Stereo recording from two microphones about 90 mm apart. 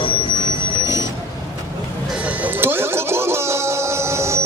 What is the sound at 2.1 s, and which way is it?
Music, 15° right (ahead or behind).